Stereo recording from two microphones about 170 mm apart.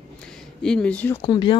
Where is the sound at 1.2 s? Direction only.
30° left (ahead or behind).